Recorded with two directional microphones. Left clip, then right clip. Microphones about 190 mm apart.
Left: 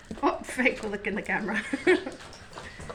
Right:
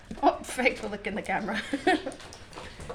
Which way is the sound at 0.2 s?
10° right (ahead or behind).